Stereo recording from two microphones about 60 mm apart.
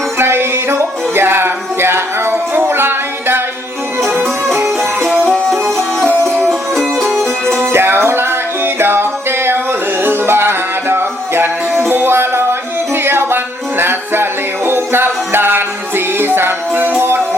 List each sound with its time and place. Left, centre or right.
0.2 s music: right
4.8 s music: centre
7.6 s music: right